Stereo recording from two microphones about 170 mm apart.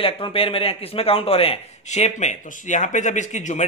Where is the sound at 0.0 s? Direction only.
30° left (ahead or behind).